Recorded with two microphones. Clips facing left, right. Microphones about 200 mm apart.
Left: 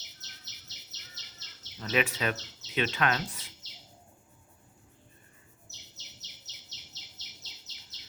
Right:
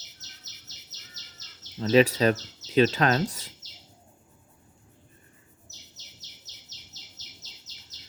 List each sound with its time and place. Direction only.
1.8 s speech: 30° right (ahead or behind)